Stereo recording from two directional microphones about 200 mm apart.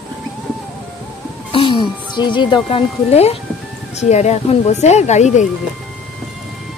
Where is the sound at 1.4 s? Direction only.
25° left (ahead or behind).